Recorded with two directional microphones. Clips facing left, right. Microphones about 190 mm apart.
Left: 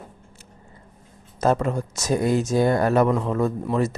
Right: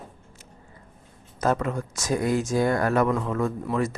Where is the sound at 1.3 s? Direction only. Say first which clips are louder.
Left 3 dB; 30° left (ahead or behind).